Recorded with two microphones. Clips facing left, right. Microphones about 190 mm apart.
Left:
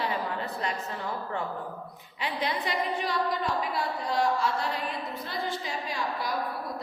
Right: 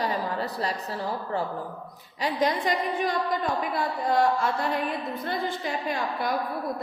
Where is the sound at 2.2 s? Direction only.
45° right (ahead or behind).